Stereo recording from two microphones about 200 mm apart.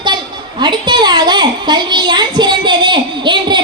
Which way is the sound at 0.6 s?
20° right (ahead or behind).